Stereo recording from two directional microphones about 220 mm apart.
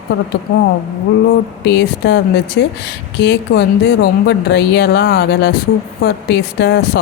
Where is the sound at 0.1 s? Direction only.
50° left (ahead or behind).